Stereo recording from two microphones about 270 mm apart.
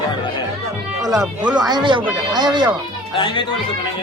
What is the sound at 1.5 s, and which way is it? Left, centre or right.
Speech, centre.